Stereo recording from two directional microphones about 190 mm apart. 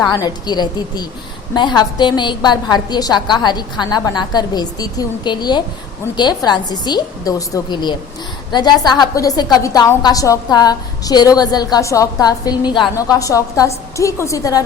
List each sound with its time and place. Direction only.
0.0 s a woman's voice: 20° left (ahead or behind)